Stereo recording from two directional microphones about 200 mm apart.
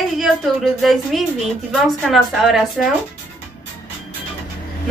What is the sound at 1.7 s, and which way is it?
Speech, centre (ahead or behind).